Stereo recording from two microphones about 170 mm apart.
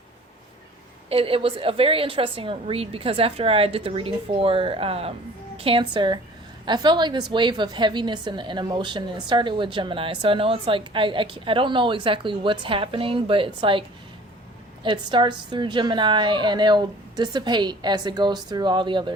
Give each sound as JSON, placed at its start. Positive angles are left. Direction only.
{"t": 1.1, "sound": "a woman's voice", "side_deg": -35}
{"t": 14.8, "sound": "a woman's voice", "side_deg": -25}